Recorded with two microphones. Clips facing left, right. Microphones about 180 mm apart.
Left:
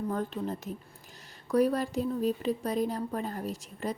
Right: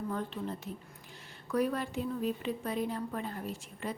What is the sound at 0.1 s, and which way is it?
A woman's voice, 45° left (ahead or behind).